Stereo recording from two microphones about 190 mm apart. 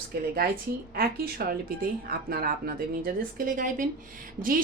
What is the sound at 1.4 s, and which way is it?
A woman's voice, 55° right (ahead or behind).